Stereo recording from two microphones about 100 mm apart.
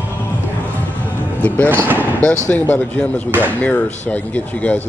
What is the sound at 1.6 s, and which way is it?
Speech, 20° right (ahead or behind).